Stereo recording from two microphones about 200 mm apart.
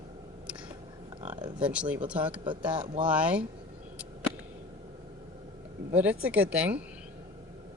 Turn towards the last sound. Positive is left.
turn(degrees=-5)  # may be behind; listen again after turning